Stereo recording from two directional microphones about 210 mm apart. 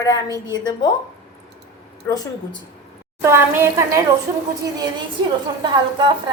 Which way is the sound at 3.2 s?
10° right (ahead or behind).